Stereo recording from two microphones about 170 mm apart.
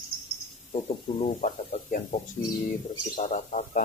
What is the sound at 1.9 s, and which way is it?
Speech, 50° left (ahead or behind).